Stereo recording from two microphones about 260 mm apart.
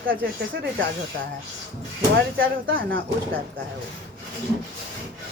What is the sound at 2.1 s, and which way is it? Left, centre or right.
Speech, right.